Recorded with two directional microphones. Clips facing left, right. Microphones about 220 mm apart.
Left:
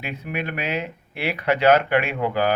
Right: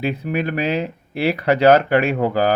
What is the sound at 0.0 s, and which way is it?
Speech, 35° right (ahead or behind).